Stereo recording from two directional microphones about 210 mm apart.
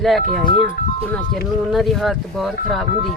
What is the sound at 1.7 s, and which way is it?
Speech, centre (ahead or behind).